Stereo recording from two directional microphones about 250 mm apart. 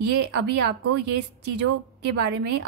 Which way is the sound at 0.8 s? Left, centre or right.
Right.